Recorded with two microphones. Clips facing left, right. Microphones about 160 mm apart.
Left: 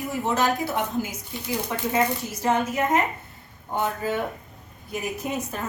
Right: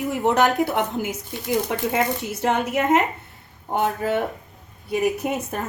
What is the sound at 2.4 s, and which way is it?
A woman's voice, 70° right (ahead or behind).